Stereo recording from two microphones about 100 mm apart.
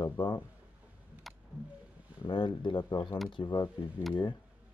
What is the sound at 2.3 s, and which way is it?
Speech, 50° left (ahead or behind).